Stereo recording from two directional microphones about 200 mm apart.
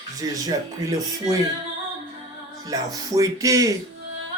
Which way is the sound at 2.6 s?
20° right (ahead or behind).